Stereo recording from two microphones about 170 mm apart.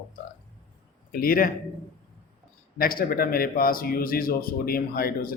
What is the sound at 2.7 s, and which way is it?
Speech, 60° left (ahead or behind).